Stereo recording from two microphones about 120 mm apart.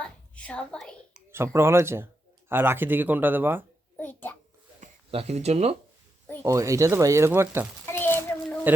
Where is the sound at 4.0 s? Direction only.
15° left (ahead or behind).